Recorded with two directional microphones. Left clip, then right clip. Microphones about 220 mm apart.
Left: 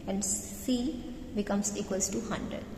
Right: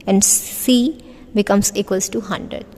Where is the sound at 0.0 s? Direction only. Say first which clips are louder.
Right 18 dB; 50° right (ahead or behind).